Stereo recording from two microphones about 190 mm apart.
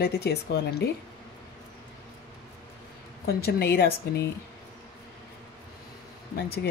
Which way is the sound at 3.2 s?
55° left (ahead or behind).